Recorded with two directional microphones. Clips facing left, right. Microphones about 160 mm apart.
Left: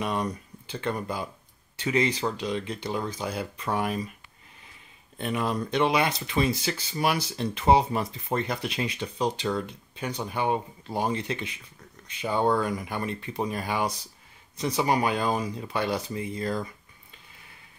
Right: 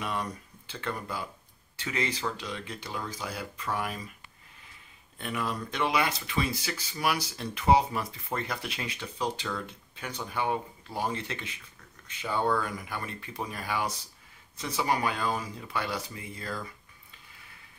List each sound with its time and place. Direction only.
0.0 s speech: 20° left (ahead or behind)
5.2 s speech: 25° left (ahead or behind)